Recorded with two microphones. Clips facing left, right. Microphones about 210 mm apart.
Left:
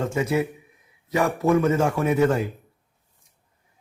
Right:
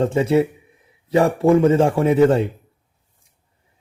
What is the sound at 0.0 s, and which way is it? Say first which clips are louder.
A man's voice: right 7 dB; 30° right (ahead or behind).